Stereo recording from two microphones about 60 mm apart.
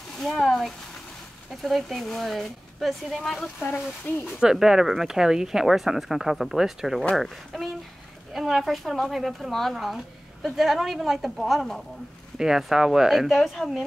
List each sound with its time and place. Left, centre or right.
0.2 s a woman's voice: centre
4.1 s speech: left
4.4 s a woman's voice: centre